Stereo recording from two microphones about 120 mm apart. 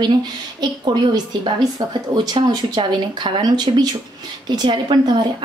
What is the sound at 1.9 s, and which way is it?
Speech, 40° right (ahead or behind).